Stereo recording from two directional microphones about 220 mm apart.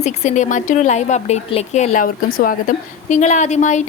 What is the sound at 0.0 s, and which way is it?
Speech, 30° left (ahead or behind).